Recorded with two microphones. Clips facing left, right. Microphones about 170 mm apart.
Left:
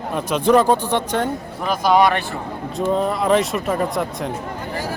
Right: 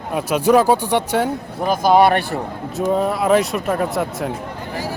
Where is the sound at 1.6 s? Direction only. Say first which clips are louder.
Right 2 dB; 45° right (ahead or behind).